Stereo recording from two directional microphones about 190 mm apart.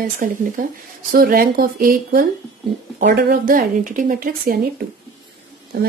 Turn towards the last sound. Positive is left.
turn(degrees=-50)  # may be behind; listen again after turning